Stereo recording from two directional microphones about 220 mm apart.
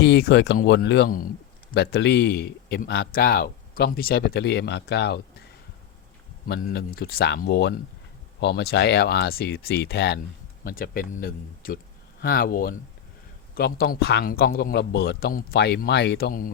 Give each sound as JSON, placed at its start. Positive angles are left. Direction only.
{"t": 0.0, "sound": "a man's voice", "side_deg": 50}
{"t": 6.5, "sound": "a man's voice", "side_deg": 45}